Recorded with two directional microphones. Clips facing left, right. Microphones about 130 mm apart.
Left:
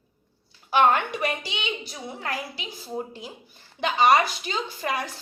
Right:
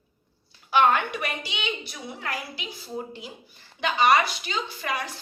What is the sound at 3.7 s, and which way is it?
Speech, 25° left (ahead or behind).